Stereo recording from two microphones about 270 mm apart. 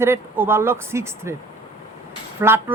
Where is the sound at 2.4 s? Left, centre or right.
Centre.